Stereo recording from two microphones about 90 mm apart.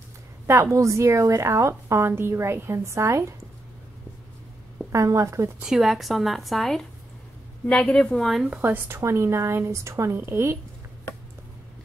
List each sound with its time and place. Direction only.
0.5 s a woman's voice: 35° right (ahead or behind)
4.9 s a woman's voice: 35° right (ahead or behind)
5.6 s a woman's voice: 5° right (ahead or behind)
8.5 s a woman's voice: 25° right (ahead or behind)